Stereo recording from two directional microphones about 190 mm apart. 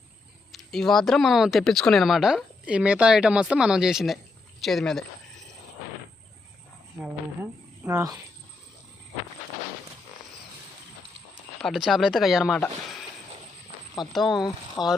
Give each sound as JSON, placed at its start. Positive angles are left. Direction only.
{"t": 0.5, "sound": "speech", "side_deg": 0}
{"t": 7.9, "sound": "speech", "side_deg": -15}
{"t": 11.6, "sound": "speech", "side_deg": 0}
{"t": 14.1, "sound": "speech", "side_deg": 0}
{"t": 14.8, "sound": "speech", "side_deg": 20}